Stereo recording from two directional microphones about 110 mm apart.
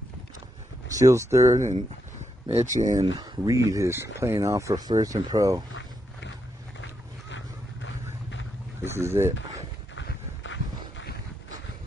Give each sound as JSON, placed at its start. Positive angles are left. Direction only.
{"t": 0.9, "sound": "speech", "side_deg": -30}
{"t": 2.5, "sound": "speech", "side_deg": -90}
{"t": 3.0, "sound": "speech", "side_deg": -40}
{"t": 8.8, "sound": "speech", "side_deg": -25}